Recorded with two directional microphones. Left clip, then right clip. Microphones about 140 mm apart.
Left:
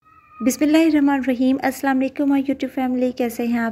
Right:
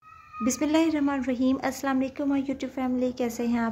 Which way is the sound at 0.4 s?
30° left (ahead or behind).